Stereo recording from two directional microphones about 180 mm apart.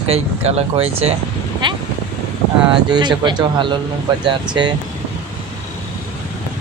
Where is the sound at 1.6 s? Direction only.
25° right (ahead or behind).